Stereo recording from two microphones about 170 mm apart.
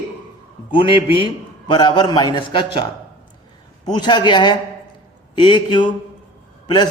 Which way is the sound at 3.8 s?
25° left (ahead or behind).